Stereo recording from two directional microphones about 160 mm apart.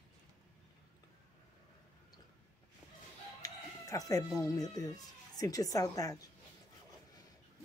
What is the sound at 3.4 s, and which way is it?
Speech, 20° left (ahead or behind).